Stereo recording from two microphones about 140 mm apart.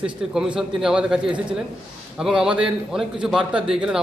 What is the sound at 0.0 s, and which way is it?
A man's voice, 5° right (ahead or behind).